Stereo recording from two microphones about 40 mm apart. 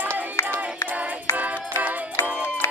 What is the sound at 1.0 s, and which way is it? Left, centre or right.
Music, right.